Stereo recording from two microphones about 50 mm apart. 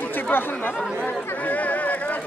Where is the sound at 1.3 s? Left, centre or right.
Left.